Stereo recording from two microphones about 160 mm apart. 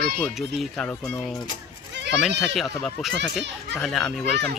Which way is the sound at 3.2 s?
Centre (ahead or behind).